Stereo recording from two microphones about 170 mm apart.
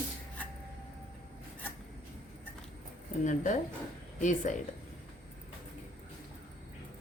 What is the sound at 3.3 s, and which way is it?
A woman's voice, 45° left (ahead or behind).